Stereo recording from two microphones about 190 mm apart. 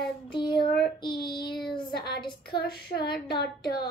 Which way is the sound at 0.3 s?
25° left (ahead or behind).